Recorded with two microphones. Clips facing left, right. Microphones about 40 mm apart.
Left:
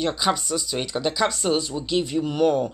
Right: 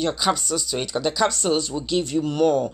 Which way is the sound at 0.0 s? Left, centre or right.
Centre.